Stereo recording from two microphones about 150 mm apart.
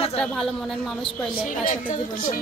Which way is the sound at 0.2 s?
5° left (ahead or behind).